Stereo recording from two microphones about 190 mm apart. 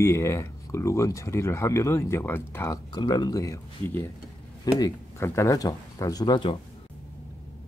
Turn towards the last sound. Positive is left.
turn(degrees=20)  # may be behind; listen again after turning